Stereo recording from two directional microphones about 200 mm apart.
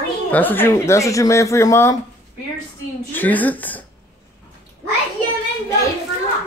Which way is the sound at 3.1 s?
10° left (ahead or behind).